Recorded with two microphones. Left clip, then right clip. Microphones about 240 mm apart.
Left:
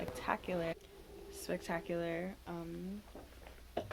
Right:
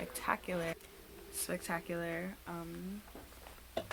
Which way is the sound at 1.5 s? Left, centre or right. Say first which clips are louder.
Even; right.